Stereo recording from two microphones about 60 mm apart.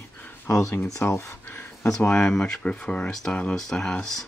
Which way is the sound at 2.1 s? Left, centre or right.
Centre.